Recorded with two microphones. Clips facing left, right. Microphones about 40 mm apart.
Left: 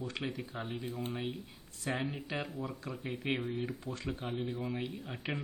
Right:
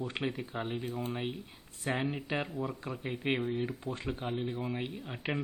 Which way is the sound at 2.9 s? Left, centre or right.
Right.